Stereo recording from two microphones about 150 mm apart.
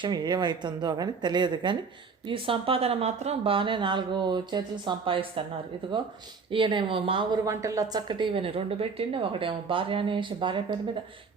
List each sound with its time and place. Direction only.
0.0 s a woman's voice: 30° right (ahead or behind)
6.5 s a woman's voice: 35° right (ahead or behind)